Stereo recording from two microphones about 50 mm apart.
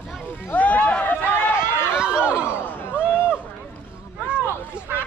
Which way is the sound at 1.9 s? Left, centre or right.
Centre.